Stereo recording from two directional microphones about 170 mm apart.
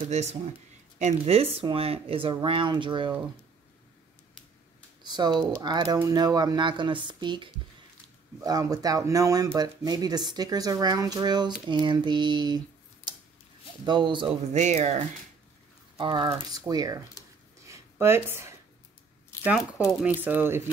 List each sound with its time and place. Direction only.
0.1 s speech: 40° right (ahead or behind)
5.0 s speech: 25° right (ahead or behind)
14.5 s speech: 40° right (ahead or behind)
16.0 s speech: 25° right (ahead or behind)
17.6 s a sound: 15° right (ahead or behind)
20.0 s speech: 10° right (ahead or behind)